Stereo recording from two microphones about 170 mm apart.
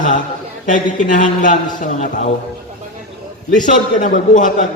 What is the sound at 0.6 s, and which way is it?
A man's voice, 45° left (ahead or behind).